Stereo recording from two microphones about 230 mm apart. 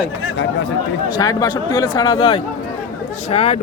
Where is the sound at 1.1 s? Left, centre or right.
Centre.